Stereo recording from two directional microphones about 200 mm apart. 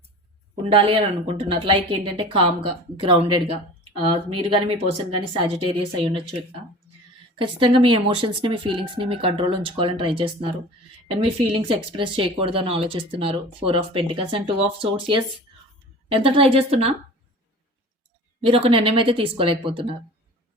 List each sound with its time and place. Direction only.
0.7 s speech: 25° right (ahead or behind)
7.3 s speech: 25° right (ahead or behind)
18.4 s speech: 25° right (ahead or behind)